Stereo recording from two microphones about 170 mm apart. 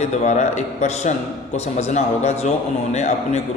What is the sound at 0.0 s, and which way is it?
A man's voice, 45° left (ahead or behind).